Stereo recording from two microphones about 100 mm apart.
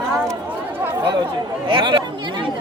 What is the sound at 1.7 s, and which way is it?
Speech, 55° right (ahead or behind).